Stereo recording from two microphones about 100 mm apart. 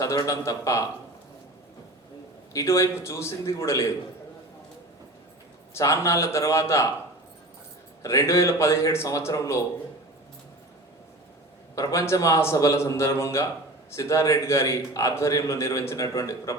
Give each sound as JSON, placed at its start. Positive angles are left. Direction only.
{"t": 0.0, "sound": "a man's voice", "side_deg": 35}
{"t": 2.5, "sound": "a man's voice", "side_deg": 30}
{"t": 5.7, "sound": "a man's voice", "side_deg": 30}
{"t": 8.0, "sound": "a man's voice", "side_deg": 30}
{"t": 11.7, "sound": "a man's voice", "side_deg": 35}